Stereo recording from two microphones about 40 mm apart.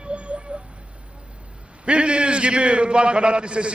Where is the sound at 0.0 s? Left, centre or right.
Right.